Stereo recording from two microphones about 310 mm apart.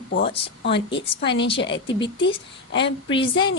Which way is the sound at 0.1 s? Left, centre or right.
Left.